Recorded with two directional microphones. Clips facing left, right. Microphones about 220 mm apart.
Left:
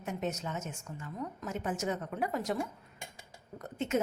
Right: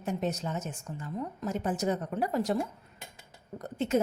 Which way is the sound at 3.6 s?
35° right (ahead or behind).